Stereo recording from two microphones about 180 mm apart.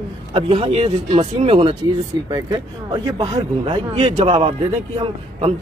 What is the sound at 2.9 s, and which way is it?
Speech, 25° right (ahead or behind).